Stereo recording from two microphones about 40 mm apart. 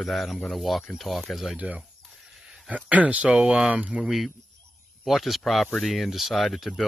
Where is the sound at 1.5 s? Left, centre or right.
Right.